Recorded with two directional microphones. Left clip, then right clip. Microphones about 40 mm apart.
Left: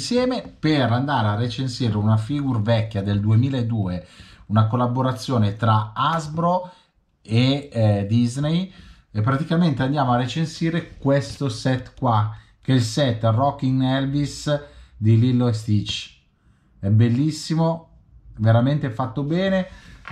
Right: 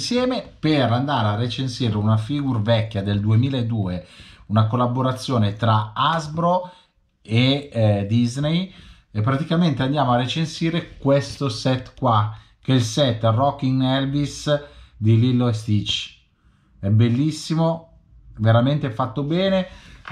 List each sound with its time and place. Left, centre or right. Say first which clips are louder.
0.1 s speech: left 1 dB; left